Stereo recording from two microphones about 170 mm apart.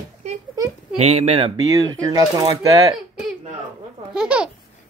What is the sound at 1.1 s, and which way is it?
Speech, 40° right (ahead or behind).